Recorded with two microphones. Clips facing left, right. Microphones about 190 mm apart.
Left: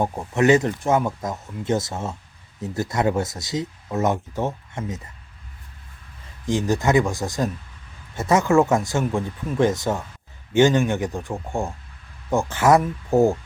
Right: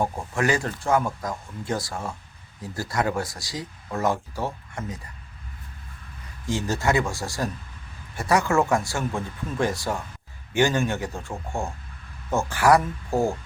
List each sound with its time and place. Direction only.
0.0 s speech: 20° left (ahead or behind)
6.4 s a man's voice: 20° left (ahead or behind)